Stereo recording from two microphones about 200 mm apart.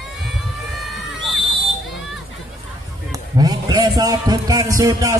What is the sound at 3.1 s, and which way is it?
A man's voice, 20° right (ahead or behind).